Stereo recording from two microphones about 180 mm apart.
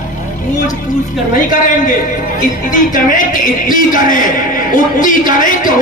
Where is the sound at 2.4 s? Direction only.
45° left (ahead or behind).